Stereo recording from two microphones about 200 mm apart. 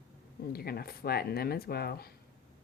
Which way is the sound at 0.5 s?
50° left (ahead or behind).